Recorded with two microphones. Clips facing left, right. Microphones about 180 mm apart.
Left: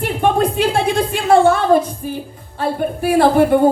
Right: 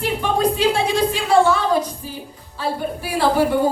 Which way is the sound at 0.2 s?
55° left (ahead or behind).